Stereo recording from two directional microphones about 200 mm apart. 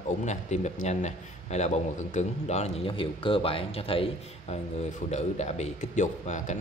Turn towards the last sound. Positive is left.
turn(degrees=35)  # may be behind; listen again after turning